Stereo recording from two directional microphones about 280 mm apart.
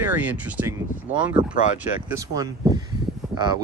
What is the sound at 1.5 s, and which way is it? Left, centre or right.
Speech, left.